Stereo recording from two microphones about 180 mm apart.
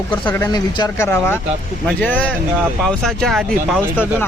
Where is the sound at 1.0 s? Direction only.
10° left (ahead or behind).